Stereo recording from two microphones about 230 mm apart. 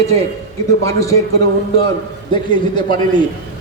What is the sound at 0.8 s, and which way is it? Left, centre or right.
Speech, centre.